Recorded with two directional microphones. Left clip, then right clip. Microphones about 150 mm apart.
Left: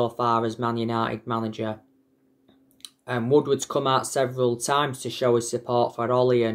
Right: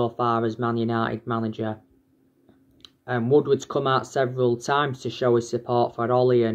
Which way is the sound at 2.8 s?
10° left (ahead or behind).